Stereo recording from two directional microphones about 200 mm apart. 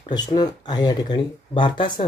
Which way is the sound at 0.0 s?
20° left (ahead or behind).